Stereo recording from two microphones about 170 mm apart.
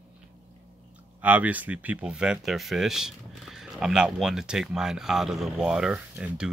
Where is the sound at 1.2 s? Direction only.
10° right (ahead or behind).